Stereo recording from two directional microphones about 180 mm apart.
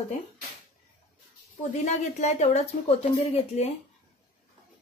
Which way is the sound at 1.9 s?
40° left (ahead or behind).